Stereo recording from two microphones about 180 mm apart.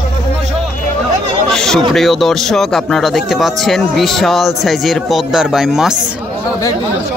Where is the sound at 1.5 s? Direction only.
5° left (ahead or behind).